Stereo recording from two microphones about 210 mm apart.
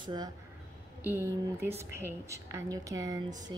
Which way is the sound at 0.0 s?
20° right (ahead or behind).